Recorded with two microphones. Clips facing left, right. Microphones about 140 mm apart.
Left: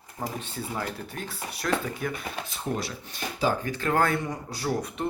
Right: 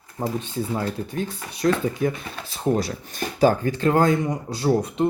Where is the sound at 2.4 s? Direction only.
40° right (ahead or behind).